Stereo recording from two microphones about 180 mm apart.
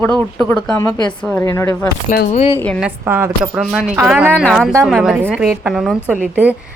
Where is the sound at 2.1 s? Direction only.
45° left (ahead or behind).